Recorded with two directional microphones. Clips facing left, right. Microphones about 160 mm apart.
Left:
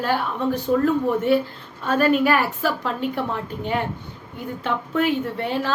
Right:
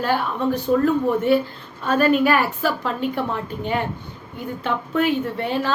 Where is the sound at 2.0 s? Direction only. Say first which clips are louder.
Right 1 dB; centre (ahead or behind).